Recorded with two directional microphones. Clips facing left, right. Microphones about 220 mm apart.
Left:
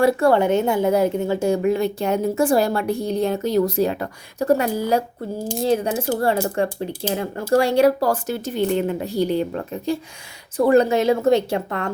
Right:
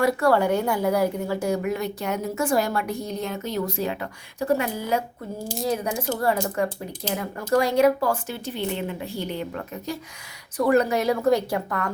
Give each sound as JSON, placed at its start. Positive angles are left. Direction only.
{"t": 0.0, "sound": "a woman's voice", "side_deg": 25}